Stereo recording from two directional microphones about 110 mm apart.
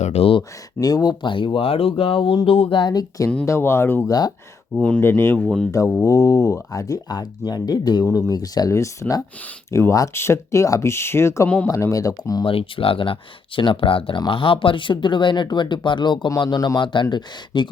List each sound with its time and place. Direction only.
0.0 s speech: 65° left (ahead or behind)
0.8 s speech: 35° left (ahead or behind)
3.4 s speech: 25° left (ahead or behind)
4.7 s speech: 10° left (ahead or behind)
6.0 s speech: 30° left (ahead or behind)
11.4 s speech: 15° left (ahead or behind)
11.7 s speech: 30° left (ahead or behind)
12.5 s speech: 55° left (ahead or behind)